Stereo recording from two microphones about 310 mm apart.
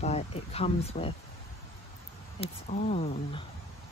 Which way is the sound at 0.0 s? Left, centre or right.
Centre.